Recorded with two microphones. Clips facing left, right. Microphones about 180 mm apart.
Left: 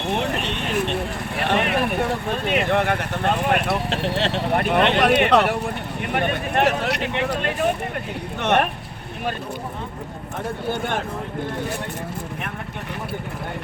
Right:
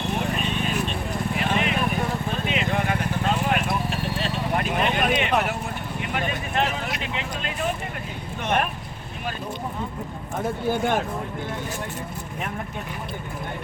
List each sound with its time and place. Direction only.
0.1 s vehicle: 70° left (ahead or behind)